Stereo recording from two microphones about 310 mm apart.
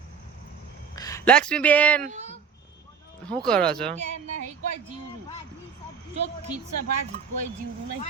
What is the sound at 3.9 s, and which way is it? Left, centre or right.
Speech, right.